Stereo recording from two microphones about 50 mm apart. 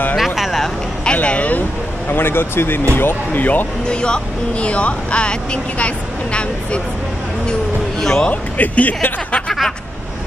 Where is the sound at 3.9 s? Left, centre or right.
Centre.